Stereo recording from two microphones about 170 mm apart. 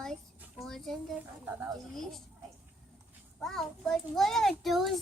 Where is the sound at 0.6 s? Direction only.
Centre (ahead or behind).